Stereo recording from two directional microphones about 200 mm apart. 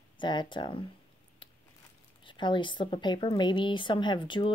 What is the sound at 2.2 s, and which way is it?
A woman's voice, 25° left (ahead or behind).